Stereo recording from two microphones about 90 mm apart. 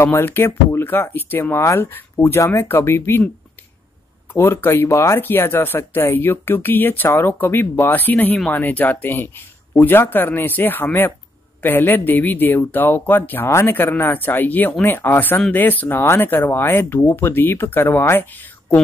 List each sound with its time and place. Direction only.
0.0 s speech: 25° left (ahead or behind)
4.3 s speech: 25° left (ahead or behind)